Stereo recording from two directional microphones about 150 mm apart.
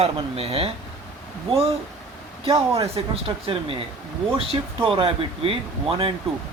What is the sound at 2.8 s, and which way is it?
Speech, 40° right (ahead or behind).